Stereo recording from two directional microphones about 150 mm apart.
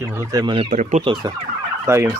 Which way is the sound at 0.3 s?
35° right (ahead or behind).